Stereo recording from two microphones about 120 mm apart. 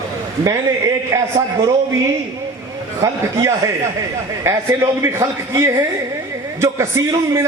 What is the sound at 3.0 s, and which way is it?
A man's voice, 25° right (ahead or behind).